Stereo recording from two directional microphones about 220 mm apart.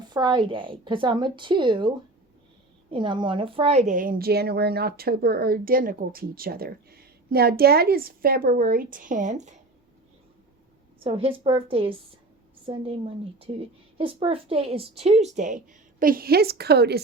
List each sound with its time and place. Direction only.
0.1 s a woman's voice: 20° right (ahead or behind)
2.9 s a woman's voice: 20° right (ahead or behind)
11.0 s a woman's voice: 25° right (ahead or behind)
14.0 s a woman's voice: 25° right (ahead or behind); by 17.0 s 45° right (ahead or behind)